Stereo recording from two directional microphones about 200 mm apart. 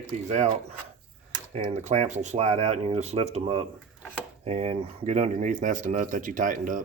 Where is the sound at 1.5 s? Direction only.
35° right (ahead or behind).